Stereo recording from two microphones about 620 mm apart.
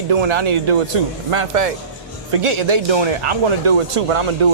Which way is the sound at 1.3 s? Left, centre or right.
Right.